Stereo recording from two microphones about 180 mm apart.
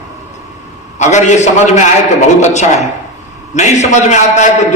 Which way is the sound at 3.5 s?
40° left (ahead or behind).